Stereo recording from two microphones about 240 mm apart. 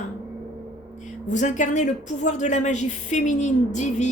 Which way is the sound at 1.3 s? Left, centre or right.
Left.